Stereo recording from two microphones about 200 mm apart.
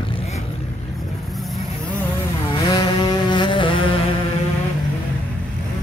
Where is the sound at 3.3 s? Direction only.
25° left (ahead or behind).